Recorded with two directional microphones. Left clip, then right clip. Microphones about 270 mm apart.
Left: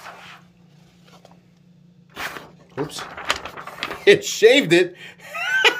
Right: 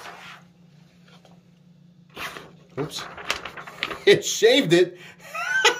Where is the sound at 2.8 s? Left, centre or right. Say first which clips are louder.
Left 5 dB; centre.